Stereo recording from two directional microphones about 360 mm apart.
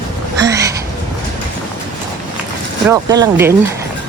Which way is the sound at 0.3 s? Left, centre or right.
Centre.